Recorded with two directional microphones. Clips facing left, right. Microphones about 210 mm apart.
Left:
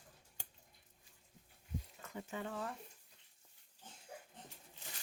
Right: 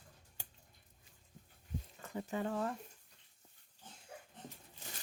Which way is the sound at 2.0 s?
40° right (ahead or behind).